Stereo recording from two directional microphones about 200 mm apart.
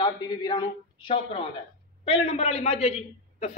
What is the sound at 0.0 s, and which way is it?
A woman's voice, 20° left (ahead or behind).